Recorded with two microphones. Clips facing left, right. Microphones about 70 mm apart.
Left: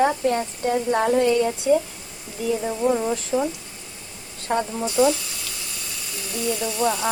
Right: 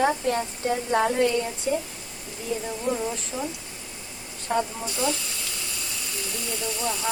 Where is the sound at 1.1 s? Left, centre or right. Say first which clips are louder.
Left 4 dB; left.